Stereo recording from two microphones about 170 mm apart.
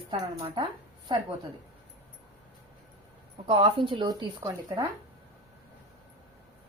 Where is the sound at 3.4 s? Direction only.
30° right (ahead or behind).